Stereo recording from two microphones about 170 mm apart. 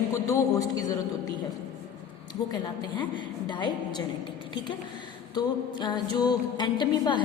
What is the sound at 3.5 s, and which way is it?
Speech, 25° left (ahead or behind).